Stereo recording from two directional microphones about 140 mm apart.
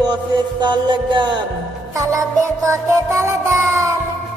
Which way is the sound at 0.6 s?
35° right (ahead or behind).